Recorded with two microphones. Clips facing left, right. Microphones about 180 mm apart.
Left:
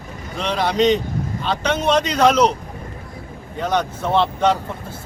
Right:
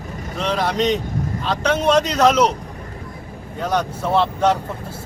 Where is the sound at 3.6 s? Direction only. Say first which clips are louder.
Even; 10° right (ahead or behind).